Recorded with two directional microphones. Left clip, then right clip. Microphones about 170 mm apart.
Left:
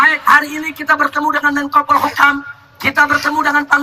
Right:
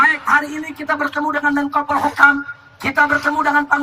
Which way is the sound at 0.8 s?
20° left (ahead or behind).